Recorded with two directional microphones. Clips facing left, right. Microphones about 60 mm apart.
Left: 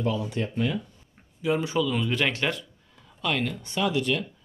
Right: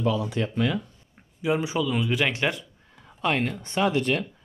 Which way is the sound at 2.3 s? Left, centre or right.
Centre.